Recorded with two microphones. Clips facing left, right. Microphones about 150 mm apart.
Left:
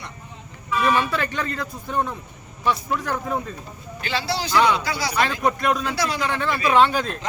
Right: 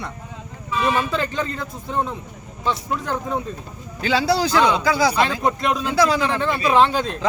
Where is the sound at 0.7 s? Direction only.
25° right (ahead or behind).